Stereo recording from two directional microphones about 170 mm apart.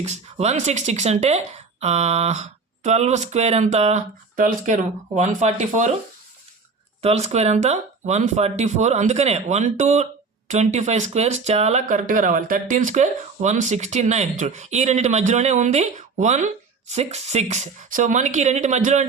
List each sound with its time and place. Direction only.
0.0 s speech: 40° right (ahead or behind)
4.4 s speech: 55° right (ahead or behind)
7.0 s speech: 40° right (ahead or behind)